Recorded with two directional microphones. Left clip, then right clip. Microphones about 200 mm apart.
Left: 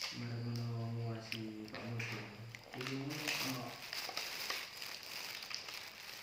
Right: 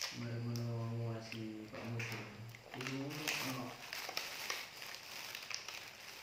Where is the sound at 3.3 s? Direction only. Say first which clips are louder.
Even; 35° right (ahead or behind).